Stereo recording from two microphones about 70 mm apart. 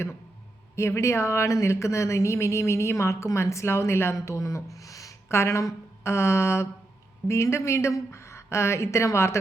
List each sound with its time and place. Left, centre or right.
0.8 s speech: left